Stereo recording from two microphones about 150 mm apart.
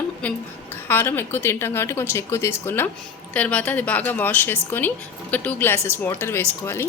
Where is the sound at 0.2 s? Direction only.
10° left (ahead or behind).